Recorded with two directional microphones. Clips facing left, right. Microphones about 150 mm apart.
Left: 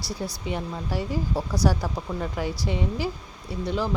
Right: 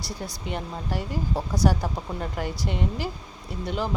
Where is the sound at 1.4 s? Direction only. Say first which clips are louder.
Right 1 dB; 20° right (ahead or behind).